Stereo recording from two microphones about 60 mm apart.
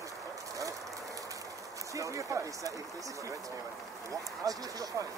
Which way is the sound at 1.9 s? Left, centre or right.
Right.